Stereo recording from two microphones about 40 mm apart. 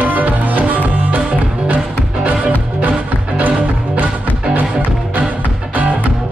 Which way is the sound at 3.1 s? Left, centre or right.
Right.